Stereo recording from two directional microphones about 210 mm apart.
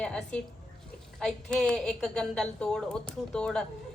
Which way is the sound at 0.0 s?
5° left (ahead or behind).